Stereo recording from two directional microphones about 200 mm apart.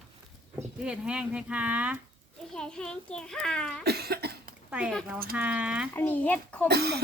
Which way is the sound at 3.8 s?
55° right (ahead or behind).